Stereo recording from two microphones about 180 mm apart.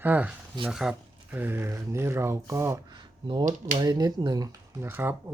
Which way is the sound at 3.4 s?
45° right (ahead or behind).